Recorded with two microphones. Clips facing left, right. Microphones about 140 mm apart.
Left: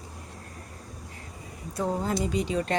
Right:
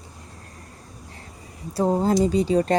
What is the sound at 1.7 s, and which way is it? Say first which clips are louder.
Speech: right 8 dB; 30° right (ahead or behind).